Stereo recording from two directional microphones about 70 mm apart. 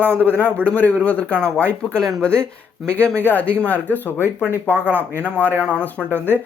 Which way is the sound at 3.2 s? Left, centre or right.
Left.